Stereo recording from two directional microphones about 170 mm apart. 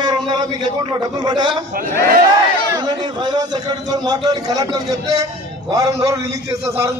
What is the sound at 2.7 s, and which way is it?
A man's voice, 25° right (ahead or behind).